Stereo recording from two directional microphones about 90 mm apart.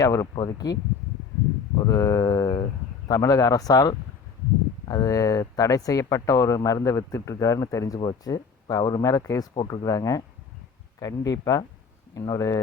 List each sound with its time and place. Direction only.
0.0 s speech: 35° left (ahead or behind)
1.9 s a sound: 35° left (ahead or behind)
3.1 s speech: 40° left (ahead or behind)
7.9 s speech: 50° left (ahead or behind)